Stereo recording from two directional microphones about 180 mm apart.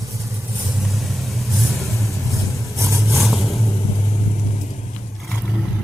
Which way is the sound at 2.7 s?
15° right (ahead or behind).